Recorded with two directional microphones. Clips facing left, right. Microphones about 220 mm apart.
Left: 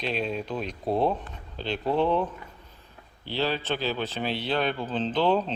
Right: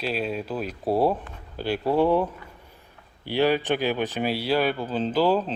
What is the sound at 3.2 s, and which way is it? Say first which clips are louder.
Speech: right 6 dB; 15° right (ahead or behind).